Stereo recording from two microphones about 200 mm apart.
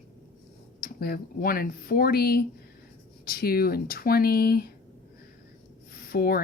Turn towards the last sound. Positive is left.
turn(degrees=50)  # may be behind; listen again after turning